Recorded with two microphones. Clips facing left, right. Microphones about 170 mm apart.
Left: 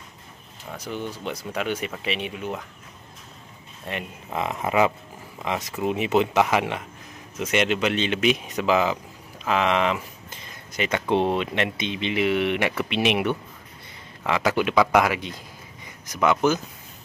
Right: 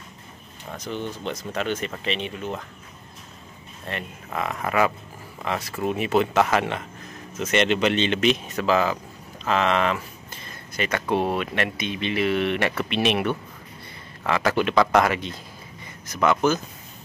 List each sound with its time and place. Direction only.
0.7 s speech: 10° left (ahead or behind)
3.8 s speech: 15° left (ahead or behind)